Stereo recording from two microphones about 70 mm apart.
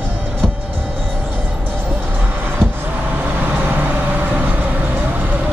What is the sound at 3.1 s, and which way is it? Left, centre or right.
Vehicle, right.